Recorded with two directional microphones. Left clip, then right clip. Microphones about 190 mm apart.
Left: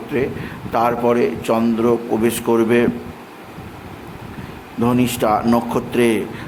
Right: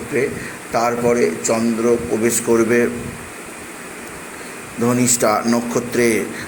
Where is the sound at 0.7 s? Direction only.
25° left (ahead or behind).